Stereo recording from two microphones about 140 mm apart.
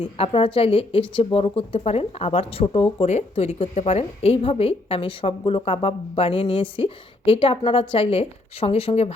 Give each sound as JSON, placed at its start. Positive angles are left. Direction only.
{"t": 0.0, "sound": "speech", "side_deg": 40}